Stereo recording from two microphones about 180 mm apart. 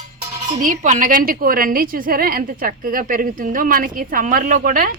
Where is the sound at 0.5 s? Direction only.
45° right (ahead or behind).